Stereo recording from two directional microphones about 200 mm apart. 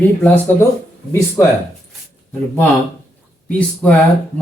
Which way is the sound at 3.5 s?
5° left (ahead or behind).